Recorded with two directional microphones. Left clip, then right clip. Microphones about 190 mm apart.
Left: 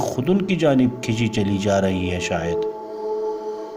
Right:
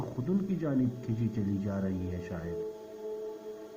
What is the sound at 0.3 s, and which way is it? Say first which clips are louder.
Speech: left 15 dB; 60° left (ahead or behind).